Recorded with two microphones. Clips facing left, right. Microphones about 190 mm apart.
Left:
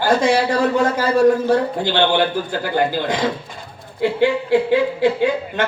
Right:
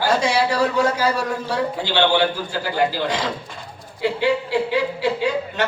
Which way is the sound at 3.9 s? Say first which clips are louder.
Left 3 dB; 50° left (ahead or behind).